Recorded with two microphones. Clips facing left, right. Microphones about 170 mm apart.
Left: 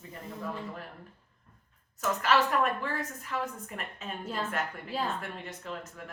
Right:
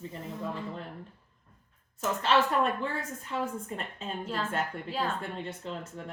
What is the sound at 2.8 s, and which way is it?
A woman's voice, 25° right (ahead or behind).